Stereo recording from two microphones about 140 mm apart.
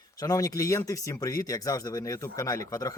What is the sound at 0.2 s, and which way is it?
Speech, 25° left (ahead or behind).